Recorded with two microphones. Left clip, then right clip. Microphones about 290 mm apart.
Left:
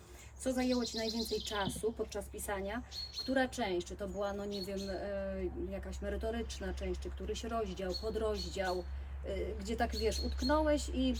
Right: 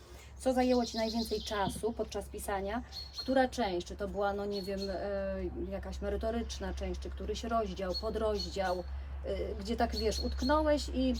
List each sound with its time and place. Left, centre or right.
0.4 s a woman's voice: centre